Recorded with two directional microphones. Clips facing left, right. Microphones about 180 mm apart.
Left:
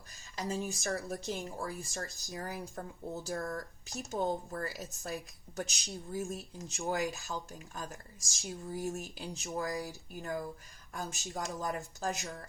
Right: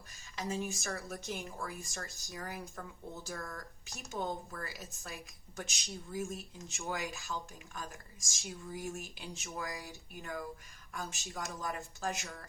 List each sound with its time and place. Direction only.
0.3 s speech: 35° left (ahead or behind)